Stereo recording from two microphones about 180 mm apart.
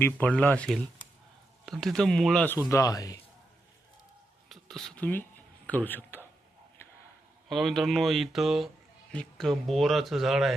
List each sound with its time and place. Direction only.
0.0 s speech: 10° left (ahead or behind)
2.6 s speech: 20° left (ahead or behind)
4.4 s a sound: centre (ahead or behind)
7.4 s speech: centre (ahead or behind)